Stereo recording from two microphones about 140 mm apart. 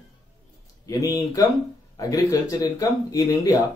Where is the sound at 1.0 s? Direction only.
25° left (ahead or behind).